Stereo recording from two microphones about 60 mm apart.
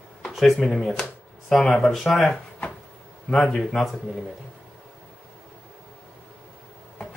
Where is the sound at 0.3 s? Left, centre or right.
Centre.